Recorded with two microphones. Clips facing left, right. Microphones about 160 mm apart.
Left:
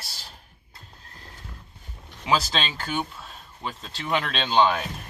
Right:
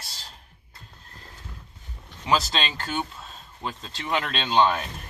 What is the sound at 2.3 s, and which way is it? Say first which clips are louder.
Speech: even; centre (ahead or behind).